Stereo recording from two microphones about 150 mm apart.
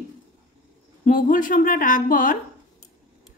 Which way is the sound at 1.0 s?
65° left (ahead or behind).